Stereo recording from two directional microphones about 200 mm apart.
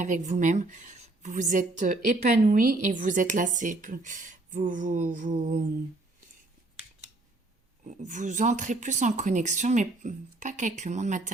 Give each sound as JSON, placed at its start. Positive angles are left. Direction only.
{"t": 0.0, "sound": "speech", "side_deg": -40}
{"t": 7.9, "sound": "speech", "side_deg": -40}